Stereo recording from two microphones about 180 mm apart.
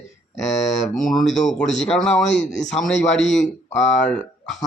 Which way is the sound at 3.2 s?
40° left (ahead or behind).